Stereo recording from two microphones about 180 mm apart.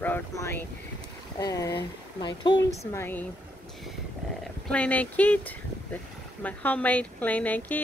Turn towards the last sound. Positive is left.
turn(degrees=10)  # may be behind; listen again after turning